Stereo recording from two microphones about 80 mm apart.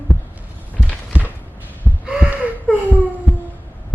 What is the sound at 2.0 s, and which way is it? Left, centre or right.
Gasp, centre.